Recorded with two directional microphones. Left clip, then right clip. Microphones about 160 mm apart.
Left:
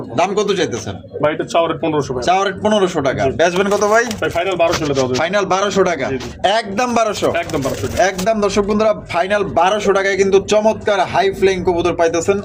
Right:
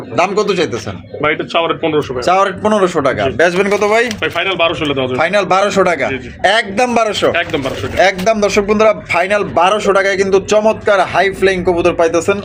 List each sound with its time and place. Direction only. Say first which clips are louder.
0.2 s a man's voice: right 3 dB; 15° right (ahead or behind)
1.2 s speech: right 1 dB; 50° left (ahead or behind)
2.2 s a man's voice: right 3 dB; 10° right (ahead or behind)
4.2 s speech: right 2 dB; 45° left (ahead or behind)
5.1 s a man's voice: right 7 dB; 5° right (ahead or behind)